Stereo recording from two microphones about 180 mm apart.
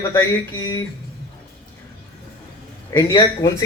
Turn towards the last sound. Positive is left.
turn(degrees=20)  # may be behind; listen again after turning